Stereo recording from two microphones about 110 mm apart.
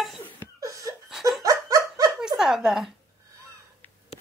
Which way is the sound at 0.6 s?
30° right (ahead or behind).